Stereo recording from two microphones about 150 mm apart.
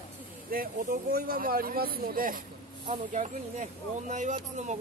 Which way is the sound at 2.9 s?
55° right (ahead or behind).